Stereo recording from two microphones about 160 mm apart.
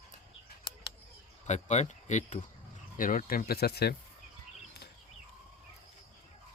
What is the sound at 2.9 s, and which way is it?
Speech, 60° left (ahead or behind).